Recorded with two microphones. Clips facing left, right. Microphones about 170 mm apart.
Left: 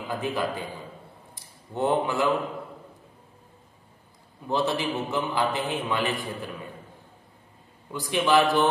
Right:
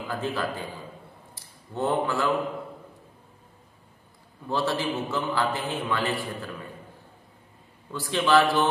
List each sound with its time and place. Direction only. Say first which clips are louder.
0.1 s a man's voice: left 2 dB; 15° left (ahead or behind)
4.5 s a man's voice: left 1 dB; 20° left (ahead or behind)
7.9 s a man's voice: even; 15° left (ahead or behind)